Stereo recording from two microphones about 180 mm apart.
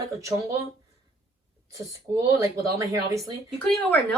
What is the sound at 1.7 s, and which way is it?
A woman's voice, 15° right (ahead or behind).